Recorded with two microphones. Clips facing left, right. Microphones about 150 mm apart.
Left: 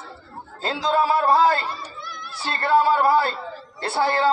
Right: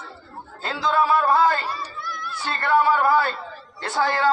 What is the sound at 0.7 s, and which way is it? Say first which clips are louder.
Speech: even; 35° left (ahead or behind).